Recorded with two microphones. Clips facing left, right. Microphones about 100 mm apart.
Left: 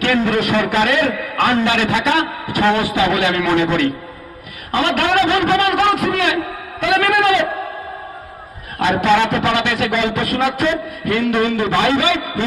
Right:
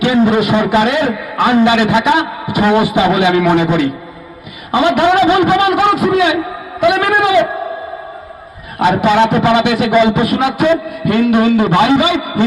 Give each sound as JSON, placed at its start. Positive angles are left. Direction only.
{"t": 0.2, "sound": "a man's voice", "side_deg": -15}
{"t": 8.8, "sound": "a man's voice", "side_deg": -15}